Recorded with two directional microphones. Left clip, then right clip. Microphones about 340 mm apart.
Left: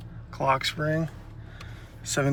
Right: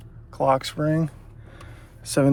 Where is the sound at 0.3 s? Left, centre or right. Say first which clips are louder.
Right 4 dB; centre.